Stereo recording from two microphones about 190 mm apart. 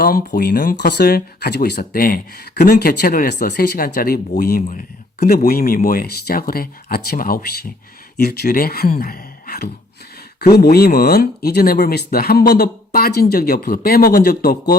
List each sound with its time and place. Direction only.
0.0 s speech: 50° left (ahead or behind)
1.8 s speech: 50° left (ahead or behind)